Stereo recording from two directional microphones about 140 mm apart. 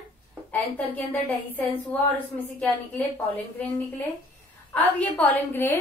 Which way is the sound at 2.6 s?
10° left (ahead or behind).